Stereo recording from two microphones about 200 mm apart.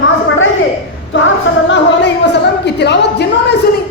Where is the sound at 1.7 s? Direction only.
60° left (ahead or behind).